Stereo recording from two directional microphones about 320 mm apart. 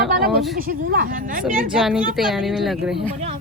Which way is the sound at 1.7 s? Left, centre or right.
Centre.